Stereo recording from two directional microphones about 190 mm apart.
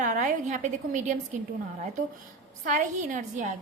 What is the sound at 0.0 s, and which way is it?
A woman's voice, 40° right (ahead or behind).